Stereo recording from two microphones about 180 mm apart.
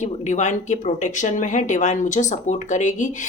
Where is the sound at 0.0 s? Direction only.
40° left (ahead or behind).